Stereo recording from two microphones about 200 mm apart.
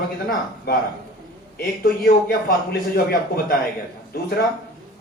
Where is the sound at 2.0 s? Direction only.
45° left (ahead or behind).